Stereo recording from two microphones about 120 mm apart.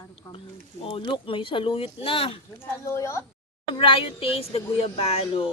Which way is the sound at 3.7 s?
45° left (ahead or behind).